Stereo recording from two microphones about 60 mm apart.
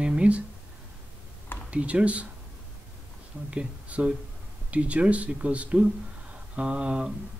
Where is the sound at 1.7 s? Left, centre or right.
Right.